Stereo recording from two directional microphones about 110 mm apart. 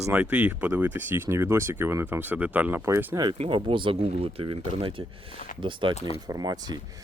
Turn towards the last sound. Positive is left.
turn(degrees=-40)  # may be behind; listen again after turning